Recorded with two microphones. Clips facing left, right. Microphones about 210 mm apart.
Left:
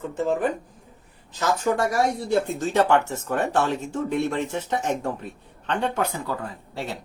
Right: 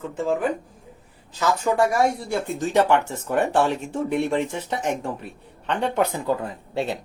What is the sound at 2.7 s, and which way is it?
Speech, 15° right (ahead or behind).